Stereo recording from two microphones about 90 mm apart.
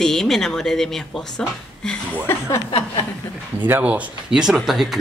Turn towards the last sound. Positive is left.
turn(degrees=-5)  # may be behind; listen again after turning